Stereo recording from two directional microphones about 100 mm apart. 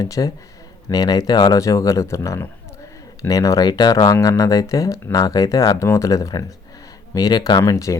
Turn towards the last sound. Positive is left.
turn(degrees=35)  # may be behind; listen again after turning